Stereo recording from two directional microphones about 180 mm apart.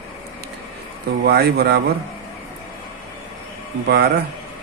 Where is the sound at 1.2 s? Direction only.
65° right (ahead or behind).